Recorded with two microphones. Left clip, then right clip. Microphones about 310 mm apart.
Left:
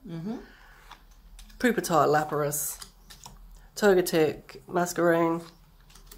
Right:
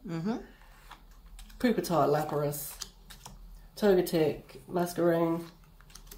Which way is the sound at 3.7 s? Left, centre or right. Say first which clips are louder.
Left 4 dB; left.